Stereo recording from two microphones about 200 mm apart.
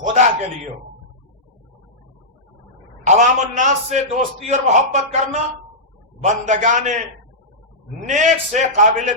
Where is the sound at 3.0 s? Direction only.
35° right (ahead or behind).